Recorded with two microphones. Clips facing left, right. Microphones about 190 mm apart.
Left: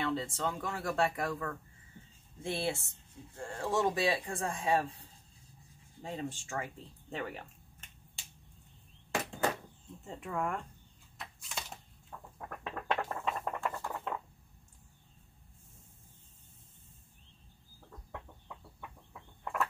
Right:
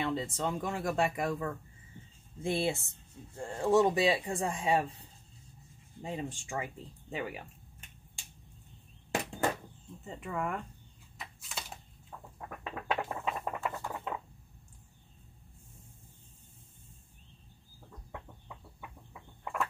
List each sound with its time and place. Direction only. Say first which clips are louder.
0.0 s speech: right 1 dB; 20° right (ahead or behind)
6.0 s speech: right 1 dB; 15° right (ahead or behind)
10.0 s speech: even; centre (ahead or behind)
11.1 s a sound: even; centre (ahead or behind)
18.1 s chicken: even; 5° right (ahead or behind)